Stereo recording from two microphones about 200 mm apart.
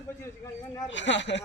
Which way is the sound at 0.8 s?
65° left (ahead or behind).